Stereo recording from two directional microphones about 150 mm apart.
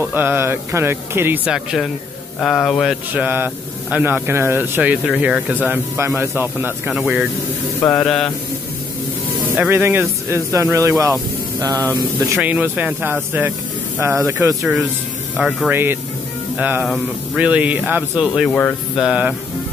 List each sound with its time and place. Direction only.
0.0 s speech: 10° right (ahead or behind)
3.1 s speech: 10° right (ahead or behind)
6.9 s speech: 5° right (ahead or behind)
9.6 s speech: 15° right (ahead or behind)
12.4 s speech: 10° right (ahead or behind)
15.3 s speech: centre (ahead or behind)
15.7 s speech: 15° right (ahead or behind)
18.5 s speech: 10° left (ahead or behind)
18.9 s speech: 5° right (ahead or behind)